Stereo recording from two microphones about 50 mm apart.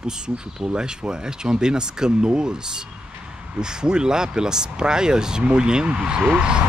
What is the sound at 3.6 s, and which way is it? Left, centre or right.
Speech, centre.